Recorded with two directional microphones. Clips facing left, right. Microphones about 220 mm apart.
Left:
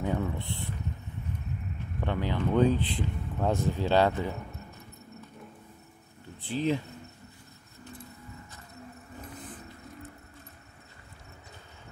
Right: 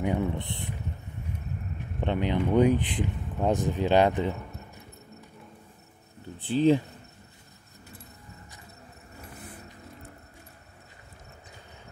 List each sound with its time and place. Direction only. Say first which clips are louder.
0.0 s speech: right 3 dB; 15° right (ahead or behind)
2.0 s speech: right 4 dB; 20° right (ahead or behind)
6.4 s speech: right 7 dB; 30° right (ahead or behind)